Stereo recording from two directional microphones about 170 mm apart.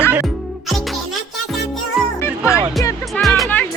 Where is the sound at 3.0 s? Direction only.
Centre (ahead or behind).